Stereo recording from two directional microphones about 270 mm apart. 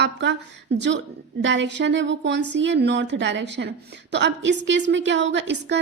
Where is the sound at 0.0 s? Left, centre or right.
Right.